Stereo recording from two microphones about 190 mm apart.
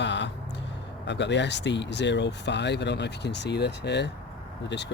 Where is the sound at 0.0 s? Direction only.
70° left (ahead or behind).